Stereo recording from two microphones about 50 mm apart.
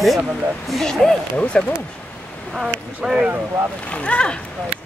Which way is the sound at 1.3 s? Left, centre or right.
Left.